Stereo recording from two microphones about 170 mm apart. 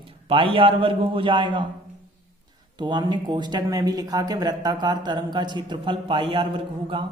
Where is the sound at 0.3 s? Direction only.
30° right (ahead or behind).